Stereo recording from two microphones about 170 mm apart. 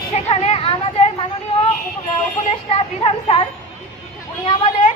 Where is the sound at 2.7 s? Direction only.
35° left (ahead or behind).